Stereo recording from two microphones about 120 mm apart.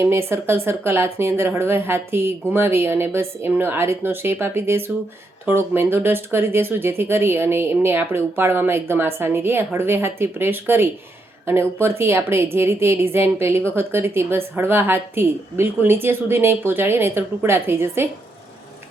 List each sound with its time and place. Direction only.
0.0 s a woman's voice: 20° right (ahead or behind)